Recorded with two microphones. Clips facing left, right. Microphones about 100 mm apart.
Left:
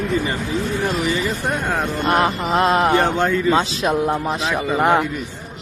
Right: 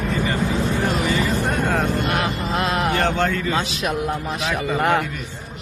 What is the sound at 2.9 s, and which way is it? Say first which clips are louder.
A man's voice: left 3 dB; 15° left (ahead or behind).